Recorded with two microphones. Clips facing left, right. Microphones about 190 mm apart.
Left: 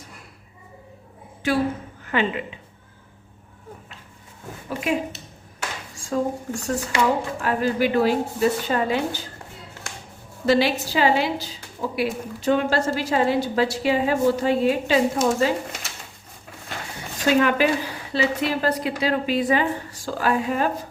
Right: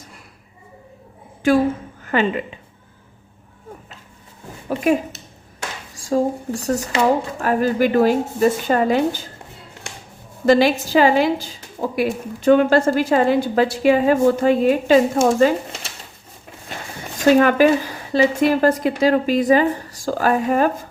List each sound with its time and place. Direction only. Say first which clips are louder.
1.4 s a woman's voice: right 6 dB; 50° right (ahead or behind)
4.8 s a woman's voice: right 6 dB; 45° right (ahead or behind)
10.4 s a woman's voice: right 5 dB; 45° right (ahead or behind)
17.2 s a woman's voice: right 6 dB; 45° right (ahead or behind)